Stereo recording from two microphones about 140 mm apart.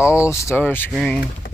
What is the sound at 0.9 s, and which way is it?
Speech, 5° left (ahead or behind).